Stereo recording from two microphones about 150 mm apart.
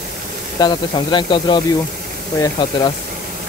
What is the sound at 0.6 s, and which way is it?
Speech, 30° left (ahead or behind).